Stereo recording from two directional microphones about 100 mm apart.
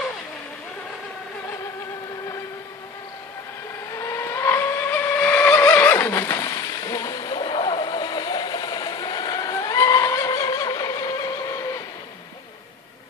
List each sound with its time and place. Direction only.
4.0 s vehicle: 25° left (ahead or behind)